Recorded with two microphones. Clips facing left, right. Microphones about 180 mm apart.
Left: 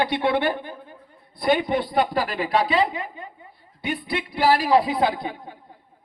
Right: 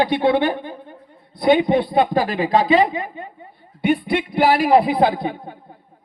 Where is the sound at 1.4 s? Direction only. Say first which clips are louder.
Right 6 dB; 20° right (ahead or behind).